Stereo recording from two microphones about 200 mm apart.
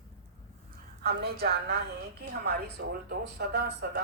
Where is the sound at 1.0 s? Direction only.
50° right (ahead or behind).